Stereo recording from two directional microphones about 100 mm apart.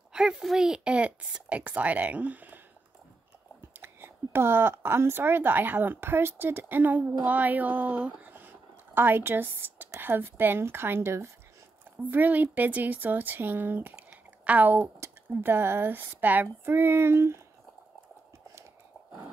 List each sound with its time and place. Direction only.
0.1 s speech: 5° right (ahead or behind)
3.7 s speech: 20° right (ahead or behind)
13.9 s a sound: 15° right (ahead or behind)
15.0 s speech: 25° right (ahead or behind)